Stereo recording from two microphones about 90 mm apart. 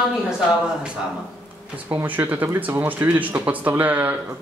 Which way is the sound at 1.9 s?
20° right (ahead or behind).